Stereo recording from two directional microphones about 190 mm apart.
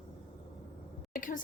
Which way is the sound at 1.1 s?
45° left (ahead or behind).